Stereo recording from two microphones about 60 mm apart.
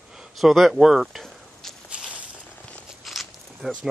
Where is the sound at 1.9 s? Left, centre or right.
Centre.